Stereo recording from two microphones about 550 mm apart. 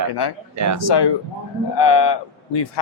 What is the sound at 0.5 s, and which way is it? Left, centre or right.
Speech, right.